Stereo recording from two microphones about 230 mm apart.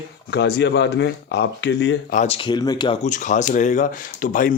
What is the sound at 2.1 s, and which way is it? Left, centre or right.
Speech, left.